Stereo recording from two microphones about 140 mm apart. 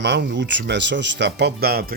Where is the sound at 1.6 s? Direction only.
90° right.